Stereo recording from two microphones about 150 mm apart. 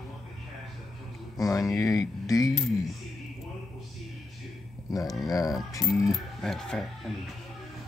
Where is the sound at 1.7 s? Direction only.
20° left (ahead or behind).